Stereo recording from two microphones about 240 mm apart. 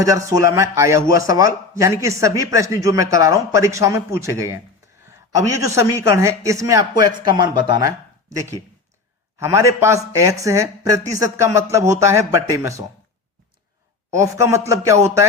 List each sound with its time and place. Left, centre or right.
0.0 s speech: centre
1.0 s a man's voice: left
1.3 s speech: centre
5.5 s speech: centre
9.4 s speech: centre
14.1 s speech: centre